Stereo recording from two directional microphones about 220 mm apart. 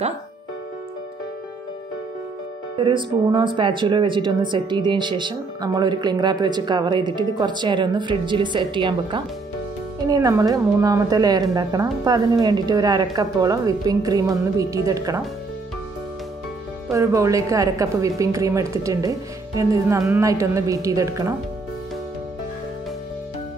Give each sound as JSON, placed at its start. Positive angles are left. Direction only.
{"t": 2.8, "sound": "a woman's voice", "side_deg": -20}
{"t": 16.9, "sound": "a woman's voice", "side_deg": -15}